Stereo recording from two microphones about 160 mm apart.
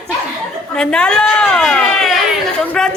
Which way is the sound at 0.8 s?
5° left (ahead or behind).